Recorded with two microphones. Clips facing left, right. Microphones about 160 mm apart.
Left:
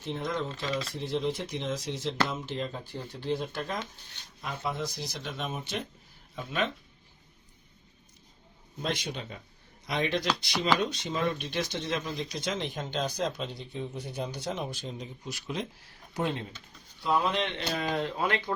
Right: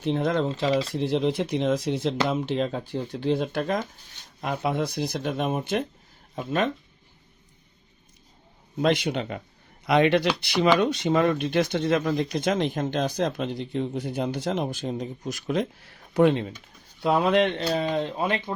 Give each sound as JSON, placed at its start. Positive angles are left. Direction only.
{"t": 0.0, "sound": "speech", "side_deg": -70}
{"t": 0.9, "sound": "speech", "side_deg": -70}
{"t": 8.8, "sound": "speech", "side_deg": -65}
{"t": 13.6, "sound": "speech", "side_deg": -90}
{"t": 14.4, "sound": "speech", "side_deg": -55}
{"t": 17.0, "sound": "speech", "side_deg": -65}
{"t": 17.7, "sound": "speech", "side_deg": -30}